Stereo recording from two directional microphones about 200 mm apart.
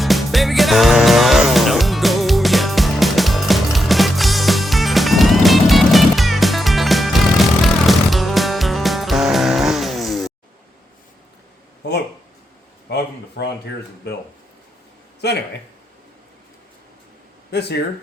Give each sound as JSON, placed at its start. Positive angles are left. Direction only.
{"t": 0.0, "sound": "music", "side_deg": 0}
{"t": 12.9, "sound": "a sound", "side_deg": 55}
{"t": 15.2, "sound": "speech", "side_deg": 55}
{"t": 17.5, "sound": "speech", "side_deg": 55}